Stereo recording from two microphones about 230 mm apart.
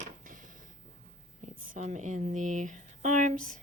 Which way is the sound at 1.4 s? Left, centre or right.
Right.